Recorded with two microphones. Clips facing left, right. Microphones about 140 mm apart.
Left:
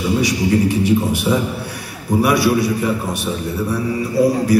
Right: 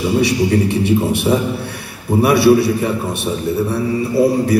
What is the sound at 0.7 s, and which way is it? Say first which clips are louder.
A man's voice: right 1 dB; 25° right (ahead or behind).